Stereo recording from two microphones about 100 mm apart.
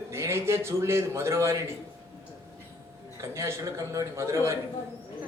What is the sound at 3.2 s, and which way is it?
A man's voice, 30° right (ahead or behind).